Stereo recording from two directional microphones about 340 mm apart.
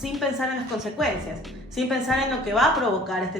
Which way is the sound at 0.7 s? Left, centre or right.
Centre.